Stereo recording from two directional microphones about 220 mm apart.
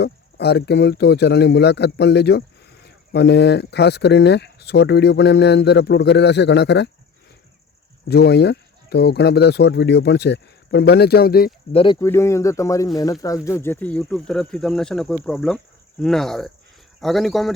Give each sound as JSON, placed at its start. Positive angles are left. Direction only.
{"t": 0.0, "sound": "speech", "side_deg": 50}
{"t": 8.0, "sound": "speech", "side_deg": 50}
{"t": 11.7, "sound": "speech", "side_deg": 20}